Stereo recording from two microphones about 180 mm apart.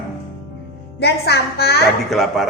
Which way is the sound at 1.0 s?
65° left (ahead or behind).